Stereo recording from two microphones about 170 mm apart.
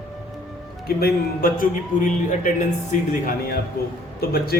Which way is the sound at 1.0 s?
60° left (ahead or behind).